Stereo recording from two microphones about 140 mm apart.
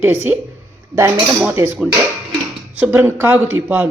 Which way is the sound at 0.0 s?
10° right (ahead or behind).